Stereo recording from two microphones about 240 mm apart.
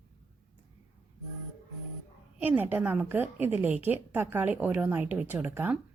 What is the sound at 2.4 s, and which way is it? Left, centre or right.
A woman's voice, centre.